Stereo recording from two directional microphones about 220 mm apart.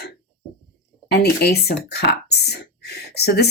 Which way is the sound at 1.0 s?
45° left (ahead or behind).